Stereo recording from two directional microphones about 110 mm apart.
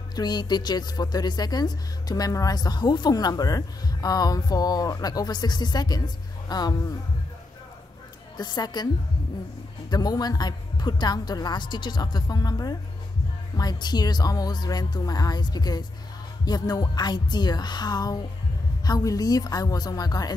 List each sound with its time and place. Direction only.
0.1 s speech: 40° left (ahead or behind)
8.4 s speech: 40° left (ahead or behind)
9.8 s speech: 40° left (ahead or behind)